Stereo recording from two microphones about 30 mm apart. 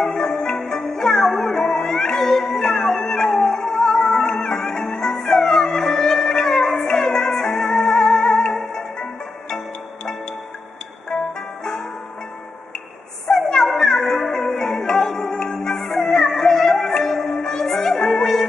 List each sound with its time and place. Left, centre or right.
0.0 s music: centre
1.5 s music: centre
3.0 s howl: left
3.3 s music: centre
8.9 s music: left
11.6 s music: centre
13.3 s a sound: centre
13.7 s music: centre
16.0 s music: centre